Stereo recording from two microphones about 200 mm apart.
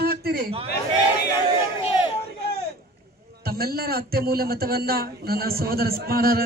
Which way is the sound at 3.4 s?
50° right (ahead or behind).